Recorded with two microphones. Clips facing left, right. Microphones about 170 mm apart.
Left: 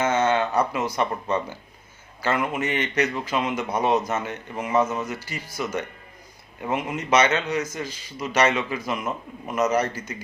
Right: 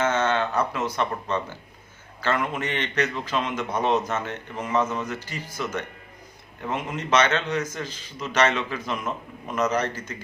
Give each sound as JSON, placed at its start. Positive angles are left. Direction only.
{"t": 0.0, "sound": "a man's voice", "side_deg": 10}